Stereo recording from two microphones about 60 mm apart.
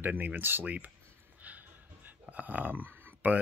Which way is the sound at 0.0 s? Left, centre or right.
Right.